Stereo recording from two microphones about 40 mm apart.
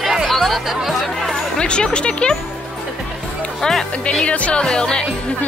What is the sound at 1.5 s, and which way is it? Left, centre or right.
Speech, left.